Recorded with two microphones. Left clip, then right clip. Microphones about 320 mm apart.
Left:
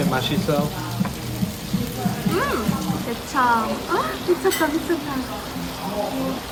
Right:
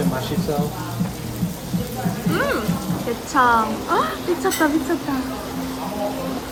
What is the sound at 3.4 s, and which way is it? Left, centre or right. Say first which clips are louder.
Frying: right 3 dB; centre.